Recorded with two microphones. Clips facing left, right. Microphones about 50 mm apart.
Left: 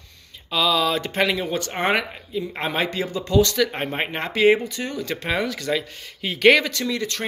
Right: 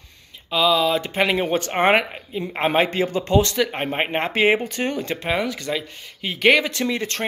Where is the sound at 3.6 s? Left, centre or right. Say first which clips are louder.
Right 1 dB; centre; by 4.7 s right.